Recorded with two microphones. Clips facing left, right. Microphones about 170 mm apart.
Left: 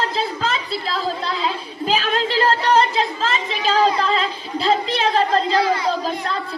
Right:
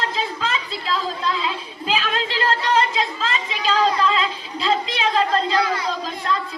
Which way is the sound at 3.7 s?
40° left (ahead or behind).